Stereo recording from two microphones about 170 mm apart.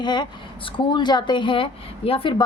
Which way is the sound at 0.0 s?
25° left (ahead or behind).